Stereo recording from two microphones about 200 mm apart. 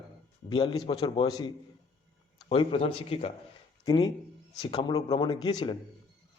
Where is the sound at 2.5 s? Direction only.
25° left (ahead or behind).